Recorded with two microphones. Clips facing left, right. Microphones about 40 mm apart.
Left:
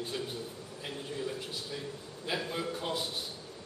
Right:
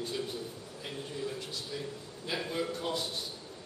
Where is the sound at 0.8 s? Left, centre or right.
Centre.